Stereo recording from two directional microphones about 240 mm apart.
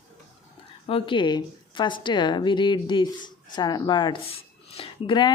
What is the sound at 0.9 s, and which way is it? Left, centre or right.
Speech, left.